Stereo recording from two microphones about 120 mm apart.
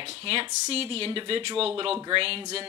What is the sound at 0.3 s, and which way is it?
Speech, 55° right (ahead or behind).